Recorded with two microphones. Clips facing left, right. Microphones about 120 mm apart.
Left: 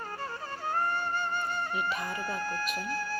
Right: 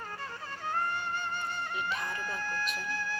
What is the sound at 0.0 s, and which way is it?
Music, 40° left (ahead or behind).